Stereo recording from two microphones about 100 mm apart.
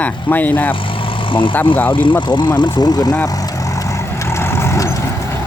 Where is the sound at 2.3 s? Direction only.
50° left (ahead or behind).